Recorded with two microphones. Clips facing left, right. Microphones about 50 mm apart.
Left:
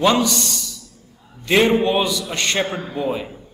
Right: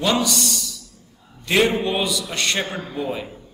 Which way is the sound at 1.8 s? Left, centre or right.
Centre.